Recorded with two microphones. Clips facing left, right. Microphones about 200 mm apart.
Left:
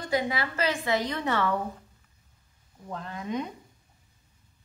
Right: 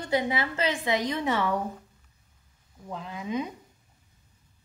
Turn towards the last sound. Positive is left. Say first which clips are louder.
# right 1 dB
turn(degrees=-5)  # may be behind; listen again after turning